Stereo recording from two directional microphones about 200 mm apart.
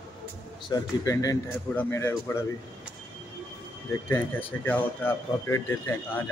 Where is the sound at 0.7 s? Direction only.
15° left (ahead or behind).